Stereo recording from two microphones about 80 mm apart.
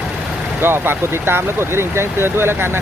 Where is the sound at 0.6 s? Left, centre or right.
Right.